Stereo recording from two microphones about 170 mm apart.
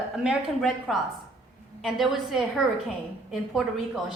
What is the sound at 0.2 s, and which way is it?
Speech, centre (ahead or behind).